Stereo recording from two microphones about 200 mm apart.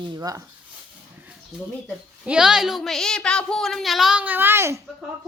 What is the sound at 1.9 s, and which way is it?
A woman's voice, 5° right (ahead or behind).